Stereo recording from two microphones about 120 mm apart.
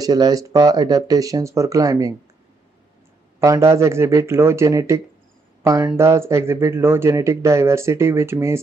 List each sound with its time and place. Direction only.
0.0 s speech: 30° right (ahead or behind)
3.3 s speech: 25° right (ahead or behind)